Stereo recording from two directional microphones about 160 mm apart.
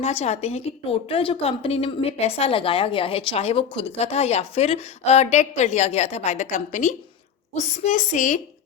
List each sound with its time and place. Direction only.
0.0 s a woman's voice: 40° left (ahead or behind)